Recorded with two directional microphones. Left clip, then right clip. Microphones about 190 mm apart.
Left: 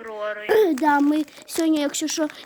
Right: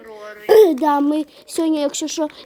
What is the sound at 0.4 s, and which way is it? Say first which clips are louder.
A child's voice: right 7 dB; 20° right (ahead or behind).